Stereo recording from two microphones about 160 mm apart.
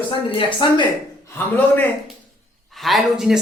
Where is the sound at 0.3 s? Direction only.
30° left (ahead or behind).